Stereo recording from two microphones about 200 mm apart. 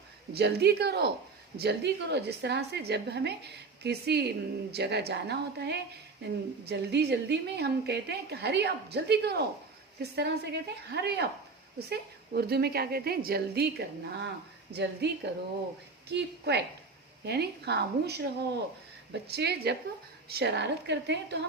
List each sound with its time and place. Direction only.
0.3 s a woman's voice: 55° right (ahead or behind)